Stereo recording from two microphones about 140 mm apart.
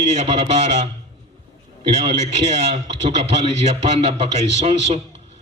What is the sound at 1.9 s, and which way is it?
A man's voice, 50° right (ahead or behind).